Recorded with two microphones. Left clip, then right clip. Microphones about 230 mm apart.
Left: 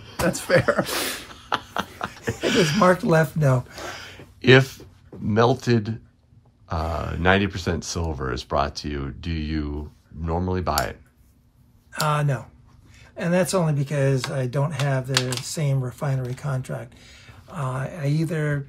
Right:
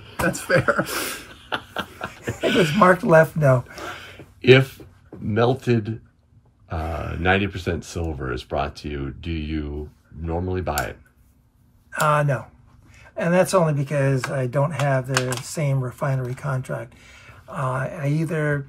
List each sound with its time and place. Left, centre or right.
0.2 s speech: left
1.3 s a sound: centre
5.3 s speech: centre
11.9 s speech: centre